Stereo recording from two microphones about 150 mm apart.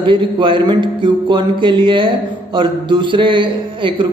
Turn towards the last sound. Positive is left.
turn(degrees=-35)  # may be behind; listen again after turning